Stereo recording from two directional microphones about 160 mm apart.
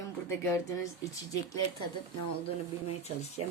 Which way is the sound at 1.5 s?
25° left (ahead or behind).